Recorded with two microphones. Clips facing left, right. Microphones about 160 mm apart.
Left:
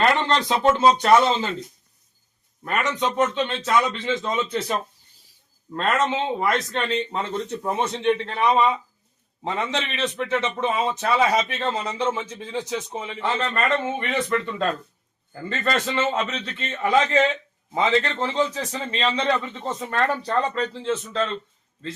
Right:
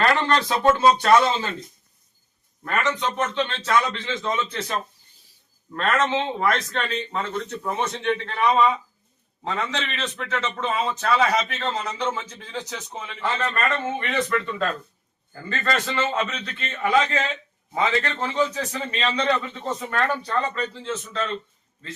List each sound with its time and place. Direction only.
0.0 s a man's voice: 20° left (ahead or behind)
2.6 s a man's voice: 15° left (ahead or behind)
5.7 s a man's voice: 15° left (ahead or behind)